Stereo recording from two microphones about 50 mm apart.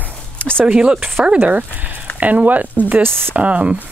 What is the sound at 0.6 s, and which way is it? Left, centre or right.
Speech, right.